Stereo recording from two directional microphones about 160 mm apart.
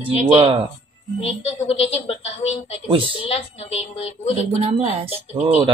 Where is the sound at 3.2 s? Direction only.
40° left (ahead or behind).